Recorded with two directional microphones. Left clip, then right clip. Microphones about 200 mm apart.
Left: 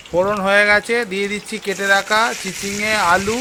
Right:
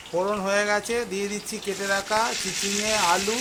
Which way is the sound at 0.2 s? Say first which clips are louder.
Left 9 dB; 30° left (ahead or behind).